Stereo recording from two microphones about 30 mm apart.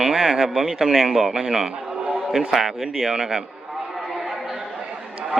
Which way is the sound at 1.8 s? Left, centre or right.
Centre.